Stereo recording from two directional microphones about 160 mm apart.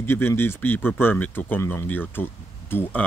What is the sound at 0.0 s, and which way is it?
Speech, 15° left (ahead or behind).